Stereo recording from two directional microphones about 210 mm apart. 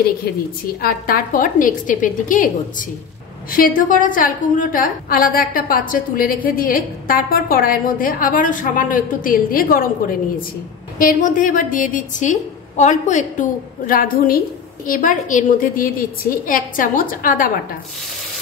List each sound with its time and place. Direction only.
0.7 s a woman's voice: 45° left (ahead or behind)
3.5 s a woman's voice: 40° left (ahead or behind)